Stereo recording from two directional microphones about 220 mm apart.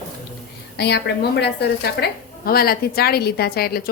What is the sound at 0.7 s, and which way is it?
A woman's voice, 50° left (ahead or behind).